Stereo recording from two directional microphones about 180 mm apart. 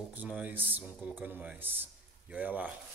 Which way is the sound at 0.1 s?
10° right (ahead or behind).